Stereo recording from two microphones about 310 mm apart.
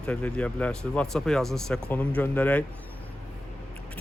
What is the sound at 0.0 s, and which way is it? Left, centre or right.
Speech, centre.